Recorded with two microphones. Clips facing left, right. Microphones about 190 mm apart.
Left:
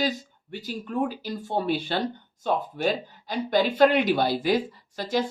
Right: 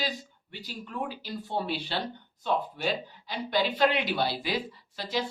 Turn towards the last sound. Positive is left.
turn(degrees=45)  # may be behind; listen again after turning